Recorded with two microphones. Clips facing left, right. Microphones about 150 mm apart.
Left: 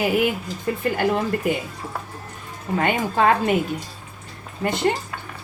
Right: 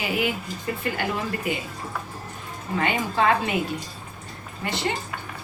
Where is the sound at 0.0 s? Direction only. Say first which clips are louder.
Left 6 dB; 50° left (ahead or behind).